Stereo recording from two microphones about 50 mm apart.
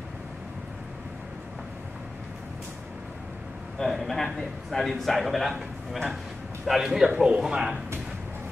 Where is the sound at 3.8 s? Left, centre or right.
Centre.